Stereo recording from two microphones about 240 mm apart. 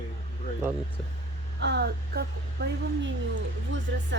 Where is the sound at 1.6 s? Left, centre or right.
Right.